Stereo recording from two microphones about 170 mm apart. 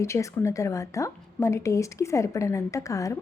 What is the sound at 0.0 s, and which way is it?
A woman's voice, 15° left (ahead or behind).